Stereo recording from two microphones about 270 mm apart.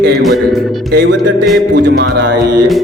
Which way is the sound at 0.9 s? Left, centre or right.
Right.